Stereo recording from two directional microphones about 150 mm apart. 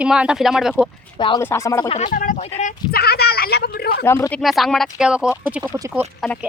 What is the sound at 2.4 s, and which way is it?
Speech, 45° left (ahead or behind).